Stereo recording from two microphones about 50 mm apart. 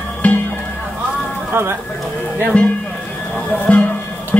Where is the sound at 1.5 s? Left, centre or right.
Right.